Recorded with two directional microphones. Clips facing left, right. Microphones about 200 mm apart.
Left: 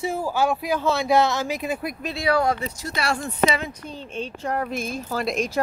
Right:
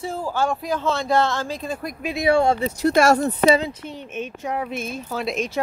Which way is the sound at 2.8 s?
50° right (ahead or behind).